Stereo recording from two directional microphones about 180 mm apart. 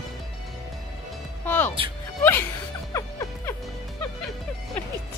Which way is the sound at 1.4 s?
10° left (ahead or behind).